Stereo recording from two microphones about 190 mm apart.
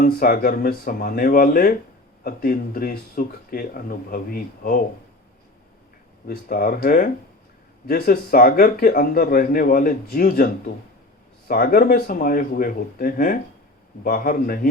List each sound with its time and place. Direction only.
0.0 s a man's voice: 50° left (ahead or behind)
6.2 s a man's voice: 50° left (ahead or behind)